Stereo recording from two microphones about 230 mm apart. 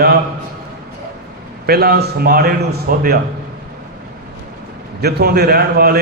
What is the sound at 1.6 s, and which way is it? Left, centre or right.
A man's voice, right.